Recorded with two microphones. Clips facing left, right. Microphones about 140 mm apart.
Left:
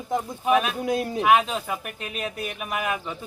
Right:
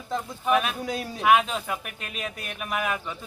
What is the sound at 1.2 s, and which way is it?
Speech, centre (ahead or behind).